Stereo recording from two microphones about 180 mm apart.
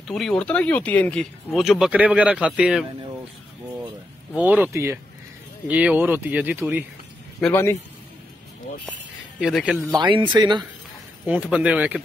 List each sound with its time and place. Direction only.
0.1 s speech: 5° left (ahead or behind)
4.4 s speech: 10° right (ahead or behind)
7.3 s a man's voice: 10° left (ahead or behind)
9.4 s speech: centre (ahead or behind)
9.8 s speech: 25° right (ahead or behind)
11.2 s speech: 5° right (ahead or behind)